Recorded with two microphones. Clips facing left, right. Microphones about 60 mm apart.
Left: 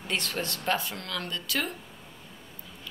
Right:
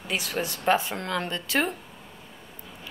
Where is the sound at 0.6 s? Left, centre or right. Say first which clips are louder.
Right 8 dB; right.